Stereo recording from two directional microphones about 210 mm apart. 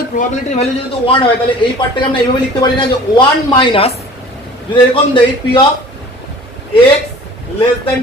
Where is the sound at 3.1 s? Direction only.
20° left (ahead or behind).